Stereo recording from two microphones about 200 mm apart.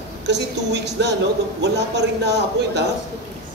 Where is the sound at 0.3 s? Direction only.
60° right (ahead or behind).